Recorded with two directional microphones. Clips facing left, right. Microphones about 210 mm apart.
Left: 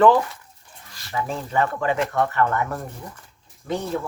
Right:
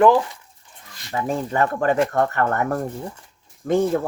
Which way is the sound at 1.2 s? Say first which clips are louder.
Right 3 dB; 45° right (ahead or behind).